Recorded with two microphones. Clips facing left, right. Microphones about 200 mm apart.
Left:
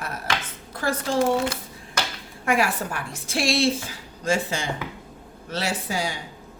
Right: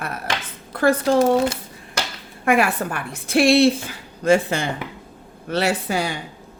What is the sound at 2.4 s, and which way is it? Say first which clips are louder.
A woman's voice: right 4 dB; 60° right (ahead or behind).